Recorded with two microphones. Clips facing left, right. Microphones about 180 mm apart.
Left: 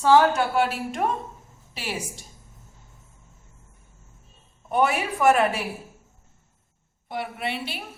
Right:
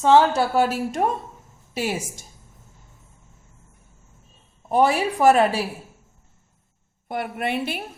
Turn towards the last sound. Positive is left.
turn(degrees=-50)  # may be behind; listen again after turning